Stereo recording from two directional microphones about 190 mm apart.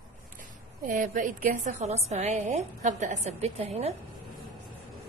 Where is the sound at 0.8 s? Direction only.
45° right (ahead or behind).